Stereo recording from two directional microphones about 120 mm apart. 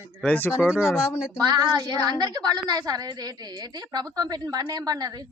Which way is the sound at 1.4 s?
35° right (ahead or behind).